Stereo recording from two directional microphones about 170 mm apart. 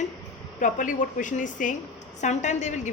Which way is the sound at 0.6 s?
50° left (ahead or behind).